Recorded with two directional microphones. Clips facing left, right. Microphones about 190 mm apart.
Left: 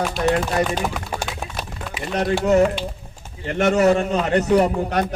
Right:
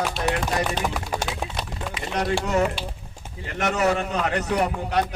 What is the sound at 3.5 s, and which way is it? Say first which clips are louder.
Speech: left 6 dB; 30° left (ahead or behind).